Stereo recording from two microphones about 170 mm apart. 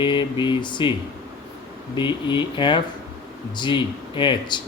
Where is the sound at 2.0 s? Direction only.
25° left (ahead or behind).